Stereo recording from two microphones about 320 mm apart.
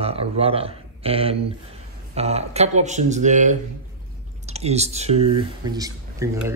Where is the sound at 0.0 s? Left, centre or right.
Centre.